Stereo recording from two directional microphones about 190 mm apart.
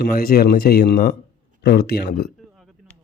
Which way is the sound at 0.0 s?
50° left (ahead or behind).